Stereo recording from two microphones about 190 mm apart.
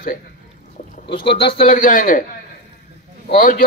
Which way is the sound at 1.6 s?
45° left (ahead or behind).